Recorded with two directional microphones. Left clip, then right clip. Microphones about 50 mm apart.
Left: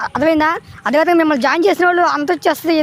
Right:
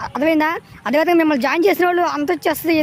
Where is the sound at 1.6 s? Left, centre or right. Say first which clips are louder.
Left 2 dB; right.